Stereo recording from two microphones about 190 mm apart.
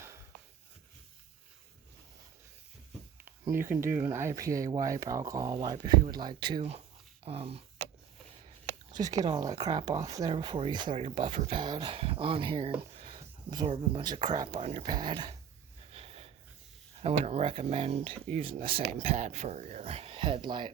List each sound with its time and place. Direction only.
3.4 s speech: 10° right (ahead or behind); by 7.6 s 30° right (ahead or behind)
9.0 s speech: 20° right (ahead or behind)
15.9 s snort: 30° right (ahead or behind)
17.0 s speech: 35° right (ahead or behind)